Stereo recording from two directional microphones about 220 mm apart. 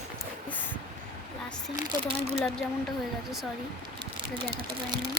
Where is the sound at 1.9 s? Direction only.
30° right (ahead or behind).